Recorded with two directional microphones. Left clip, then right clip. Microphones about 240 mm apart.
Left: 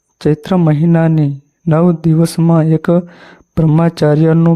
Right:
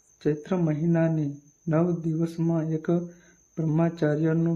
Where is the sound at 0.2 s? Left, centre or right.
Left.